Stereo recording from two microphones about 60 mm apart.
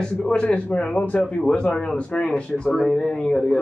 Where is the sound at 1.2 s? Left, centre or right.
Centre.